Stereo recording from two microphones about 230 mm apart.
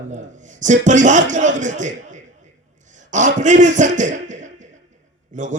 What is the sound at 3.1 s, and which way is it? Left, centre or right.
A man's voice, right.